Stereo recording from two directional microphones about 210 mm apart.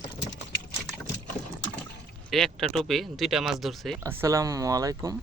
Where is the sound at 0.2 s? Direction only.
55° left (ahead or behind).